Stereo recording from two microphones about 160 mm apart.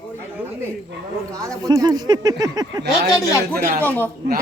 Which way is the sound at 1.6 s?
25° right (ahead or behind).